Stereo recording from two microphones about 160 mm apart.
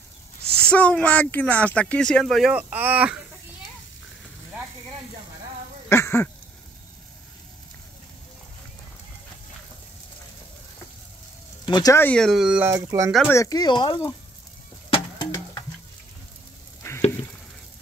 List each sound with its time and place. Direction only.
0.6 s speech: 5° left (ahead or behind); by 3.2 s 10° right (ahead or behind)
5.9 s speech: 15° left (ahead or behind)
11.6 s speech: 25° left (ahead or behind)
12.2 s speech: 5° right (ahead or behind)
12.6 s speech: 20° right (ahead or behind)
13.2 s speech: 15° left (ahead or behind)
14.9 s a sound: 25° left (ahead or behind)
16.8 s a sound: 20° left (ahead or behind)